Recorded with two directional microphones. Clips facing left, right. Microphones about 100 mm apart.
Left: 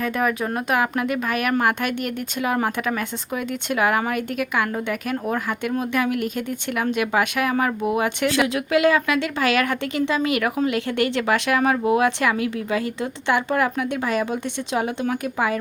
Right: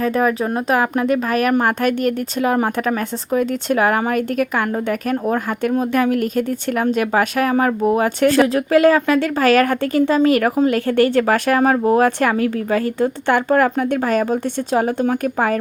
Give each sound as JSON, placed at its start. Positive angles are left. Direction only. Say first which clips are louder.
{"t": 0.0, "sound": "speech", "louder": "right 5 dB", "side_deg": -35}